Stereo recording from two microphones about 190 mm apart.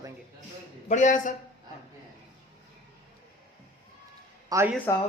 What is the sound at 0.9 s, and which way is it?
Speech, 40° left (ahead or behind).